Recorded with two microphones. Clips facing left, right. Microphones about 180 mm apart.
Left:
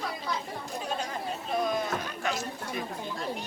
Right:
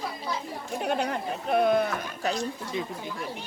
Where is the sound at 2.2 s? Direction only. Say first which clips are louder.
Right 4 dB; 35° right (ahead or behind).